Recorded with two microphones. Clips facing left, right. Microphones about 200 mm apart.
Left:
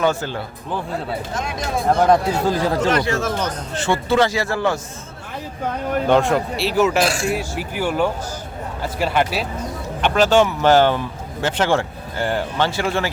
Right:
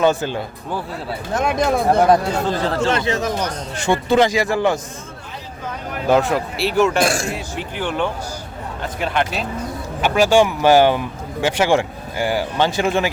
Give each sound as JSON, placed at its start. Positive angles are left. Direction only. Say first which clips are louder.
{"t": 0.0, "sound": "speech", "louder": "right 3 dB", "side_deg": -15}
{"t": 1.4, "sound": "speech", "louder": "right 9 dB", "side_deg": -60}
{"t": 2.3, "sound": "speech", "louder": "left 1 dB", "side_deg": 10}
{"t": 2.9, "sound": "speech", "louder": "even", "side_deg": -20}
{"t": 6.1, "sound": "speech", "louder": "right 1 dB", "side_deg": 0}
{"t": 7.0, "sound": "speech", "louder": "right 1 dB", "side_deg": -45}
{"t": 7.3, "sound": "speech", "louder": "left 3 dB", "side_deg": 5}
{"t": 10.0, "sound": "speech", "louder": "right 1 dB", "side_deg": -10}